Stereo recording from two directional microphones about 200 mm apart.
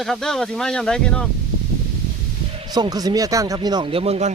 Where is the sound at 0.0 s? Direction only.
5° left (ahead or behind).